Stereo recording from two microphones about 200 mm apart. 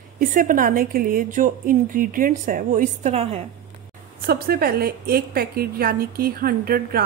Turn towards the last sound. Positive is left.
turn(degrees=-45)  # may be behind; listen again after turning